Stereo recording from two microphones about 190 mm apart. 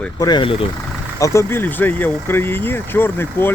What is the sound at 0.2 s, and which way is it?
Speech, 25° left (ahead or behind).